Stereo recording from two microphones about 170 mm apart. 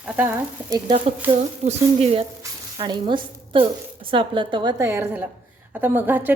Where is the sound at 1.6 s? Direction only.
35° right (ahead or behind).